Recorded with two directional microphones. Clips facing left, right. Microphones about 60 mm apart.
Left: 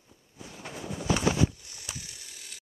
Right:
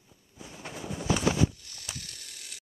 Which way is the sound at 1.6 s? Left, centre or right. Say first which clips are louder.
Even; centre.